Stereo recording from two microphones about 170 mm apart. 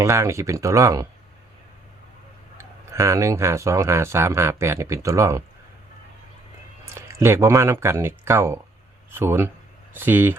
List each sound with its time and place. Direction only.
0.0 s speech: 15° right (ahead or behind)
2.6 s speech: 15° right (ahead or behind)
6.8 s speech: 15° right (ahead or behind)